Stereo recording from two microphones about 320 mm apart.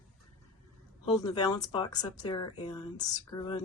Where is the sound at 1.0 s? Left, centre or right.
Centre.